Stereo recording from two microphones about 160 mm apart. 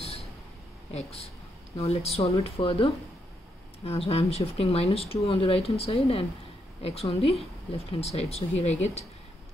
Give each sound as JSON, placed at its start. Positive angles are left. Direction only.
{"t": 0.9, "sound": "speech", "side_deg": 40}